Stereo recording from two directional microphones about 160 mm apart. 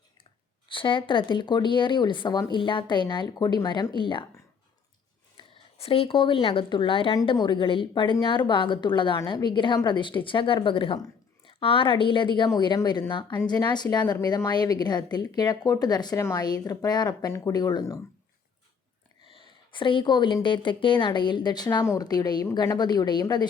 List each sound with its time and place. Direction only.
0.7 s a woman's voice: 30° left (ahead or behind)
5.4 s a woman's voice: 35° left (ahead or behind)
19.2 s a woman's voice: 30° left (ahead or behind)